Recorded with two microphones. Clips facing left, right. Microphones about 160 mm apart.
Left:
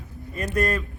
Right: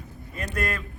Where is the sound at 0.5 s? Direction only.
40° left (ahead or behind).